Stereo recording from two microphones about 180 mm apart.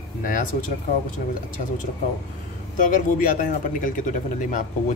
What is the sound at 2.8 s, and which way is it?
Speech, 45° left (ahead or behind).